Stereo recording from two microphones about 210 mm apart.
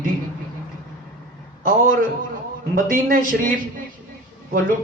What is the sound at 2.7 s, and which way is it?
Speech, 40° right (ahead or behind).